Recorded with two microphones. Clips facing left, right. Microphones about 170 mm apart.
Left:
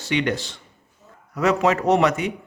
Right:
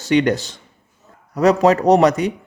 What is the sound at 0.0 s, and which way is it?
A man's voice, 40° right (ahead or behind).